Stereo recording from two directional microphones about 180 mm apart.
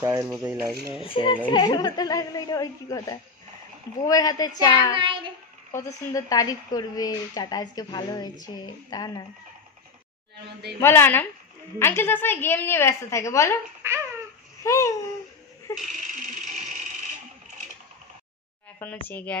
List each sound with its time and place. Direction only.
0.0 s speech: 15° right (ahead or behind)
1.0 s speech: 30° left (ahead or behind)
4.9 s child singing: 30° right (ahead or behind)
5.7 s speech: 15° left (ahead or behind)
10.8 s a woman's voice: 10° left (ahead or behind)
13.8 s speech: 15° right (ahead or behind)
14.6 s babbling: 15° left (ahead or behind)
15.8 s a sound: 45° right (ahead or behind)
19.0 s a woman's voice: 10° left (ahead or behind)